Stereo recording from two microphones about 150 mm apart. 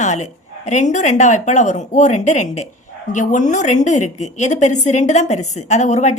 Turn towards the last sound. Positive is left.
turn(degrees=50)  # may be behind; listen again after turning